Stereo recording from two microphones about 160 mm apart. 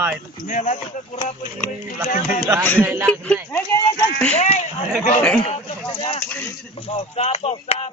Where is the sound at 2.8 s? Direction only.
15° right (ahead or behind).